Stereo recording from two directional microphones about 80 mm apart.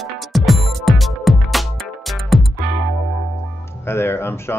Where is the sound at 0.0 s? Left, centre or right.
Centre.